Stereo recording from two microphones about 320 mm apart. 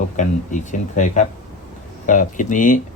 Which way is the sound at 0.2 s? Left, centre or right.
Left.